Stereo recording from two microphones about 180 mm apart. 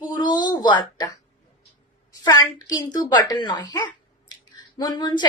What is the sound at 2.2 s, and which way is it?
A woman's voice, 20° left (ahead or behind).